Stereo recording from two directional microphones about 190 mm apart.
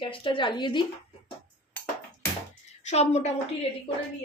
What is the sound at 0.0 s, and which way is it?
Speech, 25° left (ahead or behind).